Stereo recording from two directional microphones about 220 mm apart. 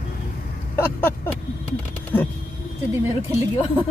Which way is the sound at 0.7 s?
10° left (ahead or behind).